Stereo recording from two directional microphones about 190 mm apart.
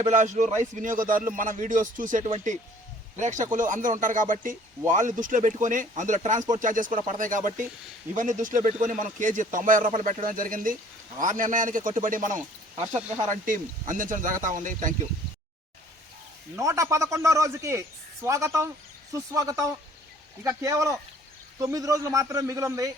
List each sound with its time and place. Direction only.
0.0 s speech: 40° right (ahead or behind)
16.6 s a man's voice: 15° right (ahead or behind)